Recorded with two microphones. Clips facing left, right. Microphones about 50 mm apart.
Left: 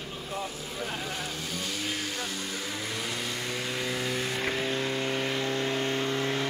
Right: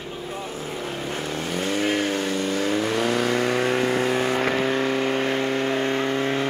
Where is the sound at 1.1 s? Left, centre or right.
Right.